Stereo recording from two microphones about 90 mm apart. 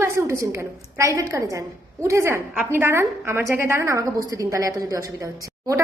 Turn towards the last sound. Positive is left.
turn(degrees=-40)  # may be behind; listen again after turning